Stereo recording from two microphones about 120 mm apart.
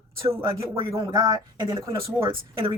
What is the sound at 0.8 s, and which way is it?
Speech, 45° right (ahead or behind).